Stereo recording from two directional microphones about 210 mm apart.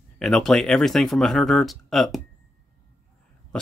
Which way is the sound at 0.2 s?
Centre (ahead or behind).